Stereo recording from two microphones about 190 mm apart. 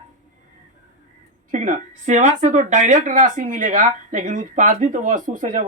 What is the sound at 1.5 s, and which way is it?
Speech, 40° right (ahead or behind).